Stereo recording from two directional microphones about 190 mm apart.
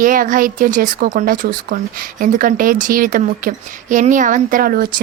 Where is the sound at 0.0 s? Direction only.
45° right (ahead or behind).